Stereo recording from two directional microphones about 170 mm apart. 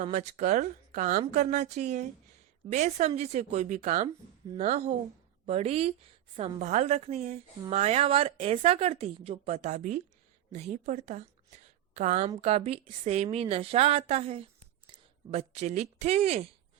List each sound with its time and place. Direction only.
0.0 s a woman's voice: 45° right (ahead or behind)